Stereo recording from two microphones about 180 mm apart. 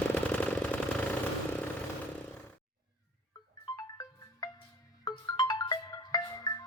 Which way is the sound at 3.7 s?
20° left (ahead or behind).